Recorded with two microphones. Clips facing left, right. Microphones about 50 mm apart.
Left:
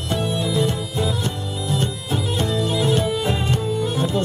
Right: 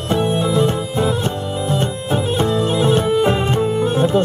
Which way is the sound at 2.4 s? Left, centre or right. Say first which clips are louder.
Right 4 dB; right.